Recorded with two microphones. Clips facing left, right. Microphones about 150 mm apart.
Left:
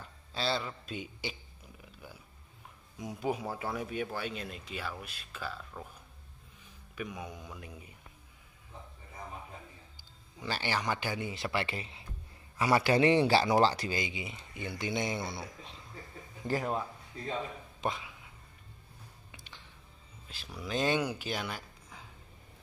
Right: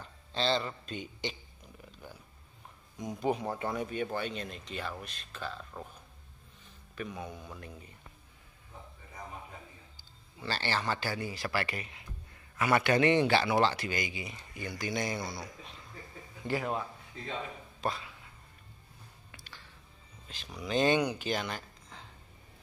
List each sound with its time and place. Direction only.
0.3 s speech: 5° left (ahead or behind)
1.9 s a sound: 10° left (ahead or behind)
3.0 s speech: 5° left (ahead or behind)
7.0 s a man's voice: 10° left (ahead or behind)
9.9 s speech: 15° left (ahead or behind)
17.7 s a sound: 15° left (ahead or behind)
19.3 s music: 20° left (ahead or behind)
20.5 s speech: centre (ahead or behind)